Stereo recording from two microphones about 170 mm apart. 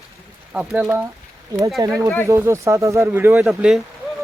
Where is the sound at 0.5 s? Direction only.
5° right (ahead or behind).